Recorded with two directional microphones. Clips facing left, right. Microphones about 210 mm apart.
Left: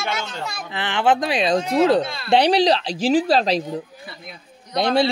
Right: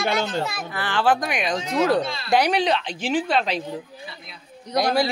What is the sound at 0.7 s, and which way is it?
A woman's voice, 20° left (ahead or behind).